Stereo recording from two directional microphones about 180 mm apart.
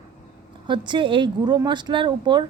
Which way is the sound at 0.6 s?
25° right (ahead or behind).